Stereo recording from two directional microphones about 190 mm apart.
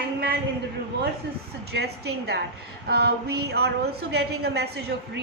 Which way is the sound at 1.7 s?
60° right (ahead or behind).